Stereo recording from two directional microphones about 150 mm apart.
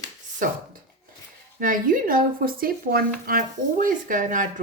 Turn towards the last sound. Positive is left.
turn(degrees=-60)  # may be behind; listen again after turning